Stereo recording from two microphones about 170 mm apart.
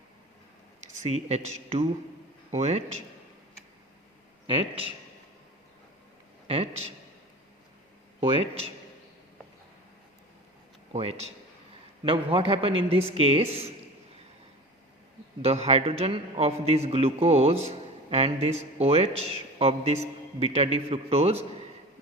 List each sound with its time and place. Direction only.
0.9 s a man's voice: 40° right (ahead or behind)
4.4 s a man's voice: 35° right (ahead or behind)
6.5 s a man's voice: 35° right (ahead or behind)
8.2 s a man's voice: 35° right (ahead or behind)
10.9 s a man's voice: 35° right (ahead or behind)
15.4 s a man's voice: 35° right (ahead or behind)